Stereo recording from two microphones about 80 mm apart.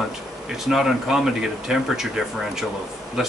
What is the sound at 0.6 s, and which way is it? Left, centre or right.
Speech, centre.